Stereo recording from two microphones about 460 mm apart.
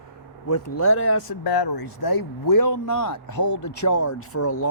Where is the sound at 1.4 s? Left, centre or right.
Left.